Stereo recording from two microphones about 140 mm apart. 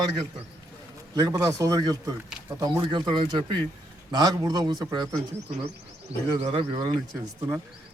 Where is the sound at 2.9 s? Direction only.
35° right (ahead or behind).